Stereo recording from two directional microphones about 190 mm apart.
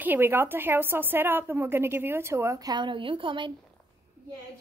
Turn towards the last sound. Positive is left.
turn(degrees=-25)  # may be behind; listen again after turning